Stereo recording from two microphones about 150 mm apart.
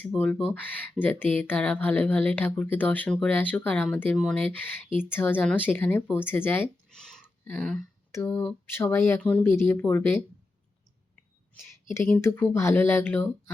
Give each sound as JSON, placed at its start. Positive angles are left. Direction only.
{"t": 0.1, "sound": "speech", "side_deg": 5}
{"t": 12.0, "sound": "speech", "side_deg": 15}